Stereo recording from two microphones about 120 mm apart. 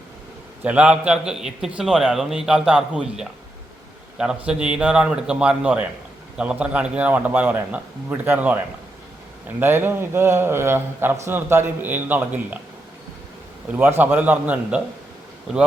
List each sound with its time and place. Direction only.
0.6 s a man's voice: 10° right (ahead or behind)
9.6 s a man's voice: 20° right (ahead or behind)
13.7 s a man's voice: 15° right (ahead or behind)